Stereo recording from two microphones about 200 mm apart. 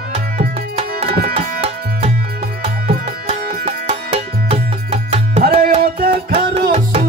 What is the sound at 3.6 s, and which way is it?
Music, 30° right (ahead or behind).